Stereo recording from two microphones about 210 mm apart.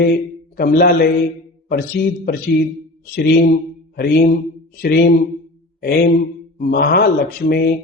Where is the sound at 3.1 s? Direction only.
50° left (ahead or behind).